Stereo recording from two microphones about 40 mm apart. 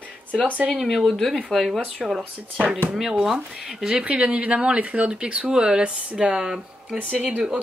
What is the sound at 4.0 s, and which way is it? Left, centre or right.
Speech, right.